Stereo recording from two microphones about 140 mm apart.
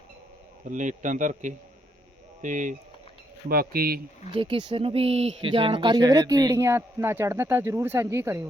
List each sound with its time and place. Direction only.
0.7 s speech: 65° right (ahead or behind)
3.5 s speech: 90° right
4.4 s speech: 40° right (ahead or behind); by 8.4 s 20° right (ahead or behind)